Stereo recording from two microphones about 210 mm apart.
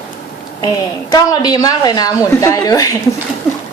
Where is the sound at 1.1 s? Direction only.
15° left (ahead or behind).